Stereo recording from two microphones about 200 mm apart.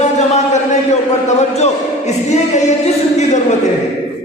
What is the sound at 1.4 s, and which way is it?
Music, 35° left (ahead or behind).